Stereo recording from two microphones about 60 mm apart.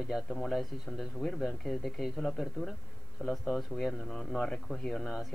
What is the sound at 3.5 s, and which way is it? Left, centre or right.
Speech, centre.